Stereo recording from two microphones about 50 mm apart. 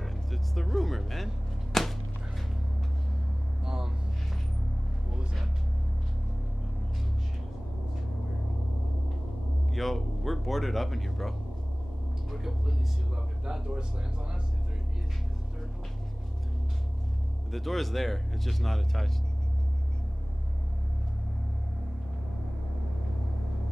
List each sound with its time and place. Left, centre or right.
0.0 s arrow: centre
3.6 s a sound: centre
9.7 s music: centre
12.3 s speech: centre
17.5 s speech: centre